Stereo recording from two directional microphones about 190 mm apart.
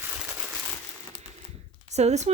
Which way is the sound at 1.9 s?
35° right (ahead or behind).